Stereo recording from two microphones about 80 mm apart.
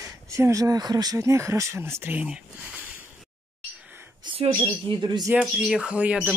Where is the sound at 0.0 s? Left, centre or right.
Right.